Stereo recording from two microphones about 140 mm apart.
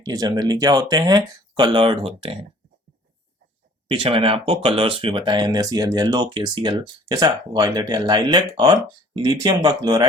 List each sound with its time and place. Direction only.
0.0 s speech: 30° right (ahead or behind)
3.8 s speech: 40° right (ahead or behind)